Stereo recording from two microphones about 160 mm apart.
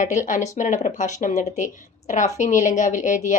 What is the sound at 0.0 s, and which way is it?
Speech, 55° left (ahead or behind).